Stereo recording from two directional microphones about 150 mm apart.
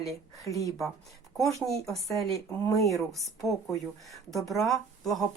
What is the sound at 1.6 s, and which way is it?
Speech, centre (ahead or behind).